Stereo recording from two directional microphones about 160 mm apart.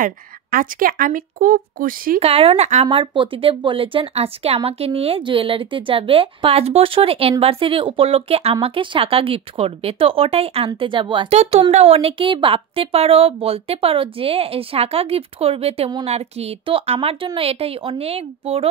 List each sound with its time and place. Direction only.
0.0 s a woman's voice: 60° right (ahead or behind)
2.1 s speech: 40° right (ahead or behind)